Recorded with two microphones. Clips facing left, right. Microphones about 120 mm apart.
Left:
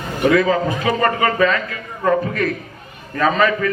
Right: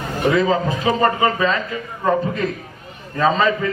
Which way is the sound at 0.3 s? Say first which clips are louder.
Left 2 dB; 25° right (ahead or behind).